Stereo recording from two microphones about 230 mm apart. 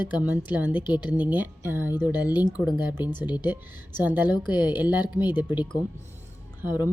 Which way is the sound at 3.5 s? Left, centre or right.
Centre.